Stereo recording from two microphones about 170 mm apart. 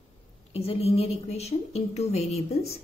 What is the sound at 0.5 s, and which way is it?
A woman's voice, 35° left (ahead or behind).